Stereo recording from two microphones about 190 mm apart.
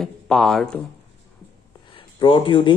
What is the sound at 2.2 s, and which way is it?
Speech, 30° left (ahead or behind).